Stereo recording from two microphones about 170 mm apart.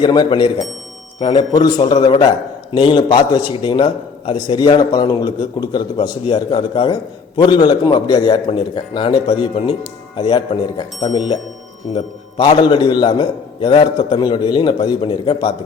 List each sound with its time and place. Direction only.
0.0 s a man's voice: 25° left (ahead or behind)
12.4 s a man's voice: 25° left (ahead or behind)